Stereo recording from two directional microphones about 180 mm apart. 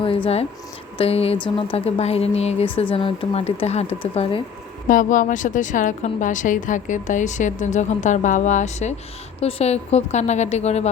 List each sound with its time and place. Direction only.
0.9 s speech: 35° left (ahead or behind)
4.9 s a woman's voice: 45° left (ahead or behind)